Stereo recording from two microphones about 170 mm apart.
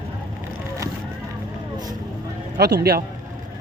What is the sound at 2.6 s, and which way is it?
Speech, 70° right (ahead or behind).